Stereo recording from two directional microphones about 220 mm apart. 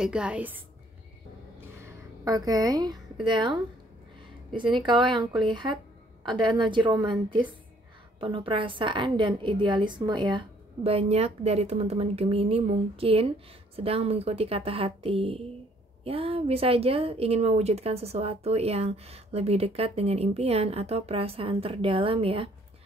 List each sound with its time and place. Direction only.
0.0 s a woman's voice: 5° right (ahead or behind)
2.2 s a woman's voice: 15° right (ahead or behind)
4.6 s a woman's voice: 20° right (ahead or behind)
6.6 s a woman's voice: 20° right (ahead or behind)
8.2 s a woman's voice: 25° right (ahead or behind)